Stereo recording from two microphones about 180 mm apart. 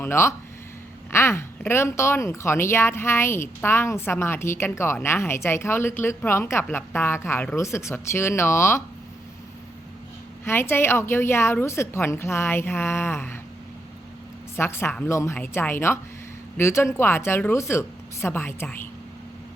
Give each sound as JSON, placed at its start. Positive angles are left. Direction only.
{"t": 0.0, "sound": "speech", "side_deg": 15}
{"t": 10.4, "sound": "speech", "side_deg": 15}
{"t": 14.5, "sound": "speech", "side_deg": 15}